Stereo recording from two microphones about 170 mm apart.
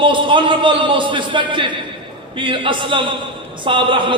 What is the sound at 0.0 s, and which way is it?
A man's voice, 30° right (ahead or behind).